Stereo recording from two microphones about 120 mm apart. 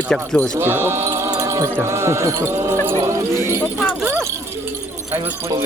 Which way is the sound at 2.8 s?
25° right (ahead or behind).